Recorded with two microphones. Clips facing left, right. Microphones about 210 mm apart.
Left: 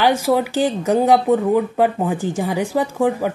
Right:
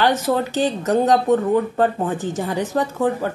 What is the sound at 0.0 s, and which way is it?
A woman's voice, 10° left (ahead or behind).